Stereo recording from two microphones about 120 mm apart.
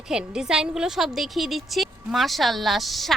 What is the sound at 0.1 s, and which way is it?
A woman's voice, 5° right (ahead or behind).